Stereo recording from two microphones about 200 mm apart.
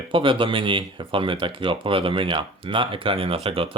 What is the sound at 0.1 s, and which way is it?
Speech, 25° right (ahead or behind).